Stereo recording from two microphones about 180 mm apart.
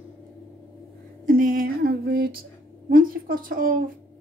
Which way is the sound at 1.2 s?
50° right (ahead or behind).